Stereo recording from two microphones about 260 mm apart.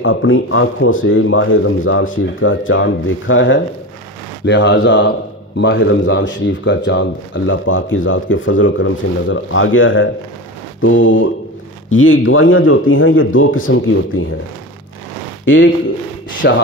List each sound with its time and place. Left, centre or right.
0.0 s speech: left
15.4 s speech: left